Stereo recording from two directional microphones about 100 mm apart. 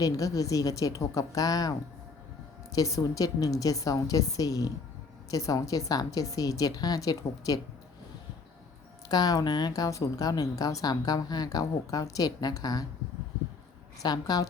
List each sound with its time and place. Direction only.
0.0 s a woman's voice: 35° left (ahead or behind)
2.7 s a woman's voice: 35° left (ahead or behind)
9.0 s a woman's voice: 40° left (ahead or behind)
14.0 s a woman's voice: 40° left (ahead or behind)